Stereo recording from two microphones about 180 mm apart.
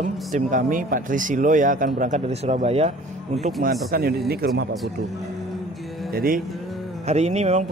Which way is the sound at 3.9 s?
55° right (ahead or behind).